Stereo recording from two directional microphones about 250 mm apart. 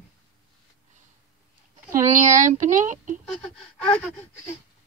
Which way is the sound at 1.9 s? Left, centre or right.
Right.